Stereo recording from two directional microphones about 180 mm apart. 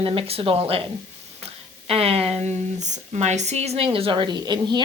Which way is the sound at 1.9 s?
35° right (ahead or behind).